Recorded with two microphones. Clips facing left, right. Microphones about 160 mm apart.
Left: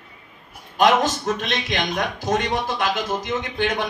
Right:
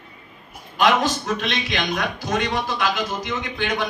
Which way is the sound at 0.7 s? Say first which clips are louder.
Left 1 dB; 45° left (ahead or behind).